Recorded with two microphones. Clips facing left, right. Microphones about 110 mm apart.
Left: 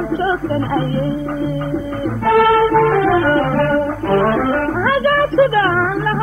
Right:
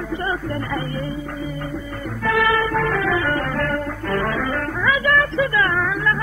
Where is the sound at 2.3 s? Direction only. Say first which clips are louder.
Left 8 dB; 45° left (ahead or behind).